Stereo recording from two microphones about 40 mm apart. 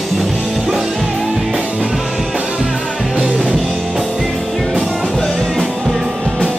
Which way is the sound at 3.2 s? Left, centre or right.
Centre.